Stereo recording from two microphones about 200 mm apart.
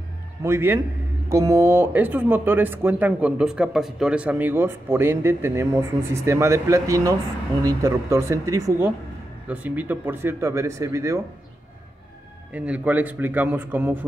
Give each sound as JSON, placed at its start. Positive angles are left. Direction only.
{"t": 0.4, "sound": "speech", "side_deg": -10}
{"t": 12.5, "sound": "speech", "side_deg": -5}